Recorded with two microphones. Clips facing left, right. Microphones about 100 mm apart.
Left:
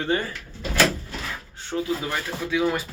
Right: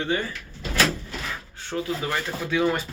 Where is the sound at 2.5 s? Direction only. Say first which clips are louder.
Even; 5° left (ahead or behind).